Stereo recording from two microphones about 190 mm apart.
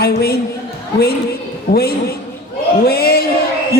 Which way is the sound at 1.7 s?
55° left (ahead or behind).